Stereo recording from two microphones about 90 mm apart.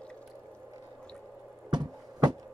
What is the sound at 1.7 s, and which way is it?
Music, 55° right (ahead or behind).